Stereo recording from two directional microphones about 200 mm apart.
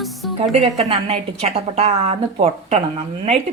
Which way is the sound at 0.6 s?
30° right (ahead or behind).